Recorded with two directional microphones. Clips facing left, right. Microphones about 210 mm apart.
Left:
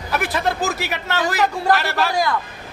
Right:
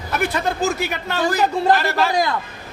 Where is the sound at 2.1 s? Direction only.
20° right (ahead or behind).